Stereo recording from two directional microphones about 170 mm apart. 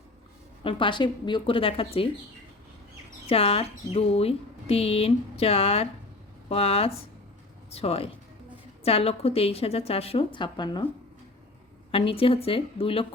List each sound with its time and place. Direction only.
0.6 s speech: 30° left (ahead or behind)
3.2 s speech: 35° left (ahead or behind)
11.9 s speech: 35° left (ahead or behind)